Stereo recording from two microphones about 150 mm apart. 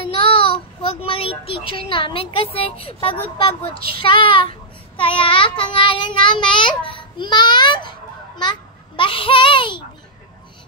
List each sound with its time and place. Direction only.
0.2 s a child's voice: 35° left (ahead or behind)
3.3 s child singing: 35° left (ahead or behind)
8.4 s a child's voice: 30° left (ahead or behind)